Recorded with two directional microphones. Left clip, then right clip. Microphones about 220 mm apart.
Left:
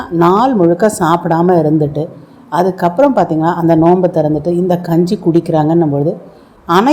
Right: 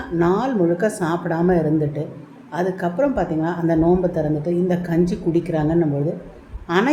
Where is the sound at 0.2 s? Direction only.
25° left (ahead or behind).